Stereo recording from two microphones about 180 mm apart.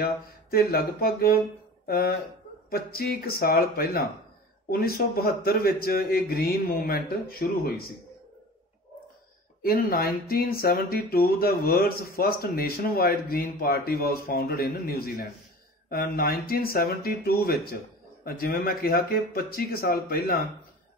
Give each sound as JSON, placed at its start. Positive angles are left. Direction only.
{"t": 0.0, "sound": "speech", "side_deg": 60}
{"t": 9.6, "sound": "speech", "side_deg": 55}